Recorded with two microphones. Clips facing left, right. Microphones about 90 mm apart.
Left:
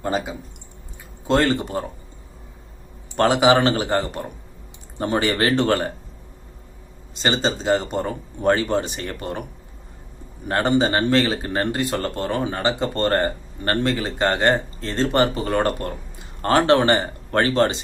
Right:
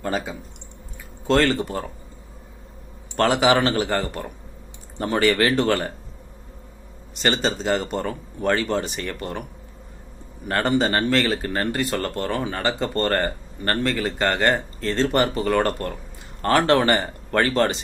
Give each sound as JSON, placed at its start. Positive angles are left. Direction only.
{"t": 0.0, "sound": "speech", "side_deg": 15}
{"t": 3.2, "sound": "speech", "side_deg": 20}
{"t": 7.2, "sound": "speech", "side_deg": 20}
{"t": 10.5, "sound": "speech", "side_deg": 20}